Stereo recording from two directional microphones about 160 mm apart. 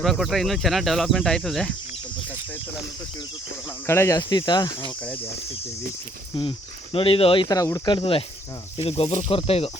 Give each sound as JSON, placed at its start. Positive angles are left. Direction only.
{"t": 0.0, "sound": "speech", "side_deg": 0}
{"t": 3.8, "sound": "speech", "side_deg": 15}
{"t": 6.9, "sound": "speech", "side_deg": 35}
{"t": 7.4, "sound": "speech", "side_deg": 20}